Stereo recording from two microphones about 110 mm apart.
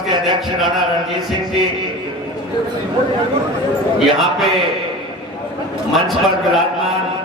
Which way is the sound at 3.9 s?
Centre (ahead or behind).